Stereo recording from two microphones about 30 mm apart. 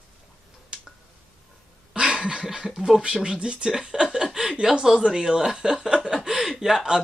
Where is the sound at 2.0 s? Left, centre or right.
Right.